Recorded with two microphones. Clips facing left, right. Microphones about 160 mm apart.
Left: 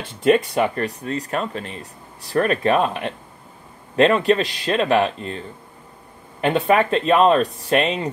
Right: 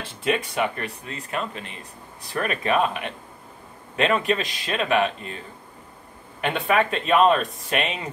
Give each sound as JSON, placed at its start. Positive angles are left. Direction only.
{"t": 0.2, "sound": "speech", "side_deg": 40}
{"t": 6.4, "sound": "speech", "side_deg": 35}